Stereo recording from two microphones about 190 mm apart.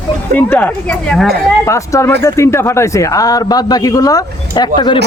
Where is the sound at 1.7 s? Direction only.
15° left (ahead or behind).